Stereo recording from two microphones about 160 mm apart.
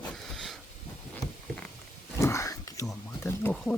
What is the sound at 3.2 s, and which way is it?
Speech, 10° left (ahead or behind).